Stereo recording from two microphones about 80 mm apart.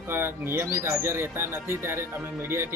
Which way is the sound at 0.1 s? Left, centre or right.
Right.